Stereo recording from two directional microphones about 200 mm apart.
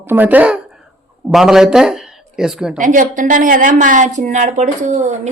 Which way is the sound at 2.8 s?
40° right (ahead or behind).